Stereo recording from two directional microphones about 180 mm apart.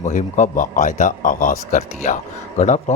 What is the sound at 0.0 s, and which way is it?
A man's voice, 45° left (ahead or behind).